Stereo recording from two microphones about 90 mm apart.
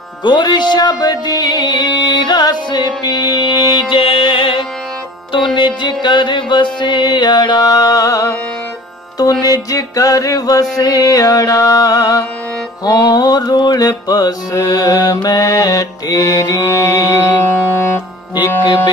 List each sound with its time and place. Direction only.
0.2 s music: 55° left (ahead or behind)
4.0 s music: 75° left (ahead or behind); by 17.4 s 40° left (ahead or behind)
17.4 s music: 25° left (ahead or behind)